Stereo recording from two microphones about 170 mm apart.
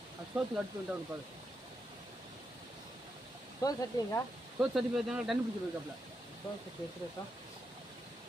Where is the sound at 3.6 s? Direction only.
20° left (ahead or behind).